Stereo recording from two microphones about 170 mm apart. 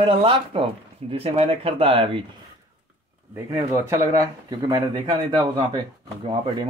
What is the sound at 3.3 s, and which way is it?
Speech, 15° right (ahead or behind).